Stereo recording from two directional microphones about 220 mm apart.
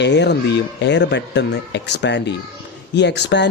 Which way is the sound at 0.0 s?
50° left (ahead or behind).